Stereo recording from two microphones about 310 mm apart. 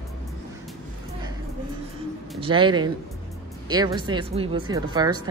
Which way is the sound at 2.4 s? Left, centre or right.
Centre.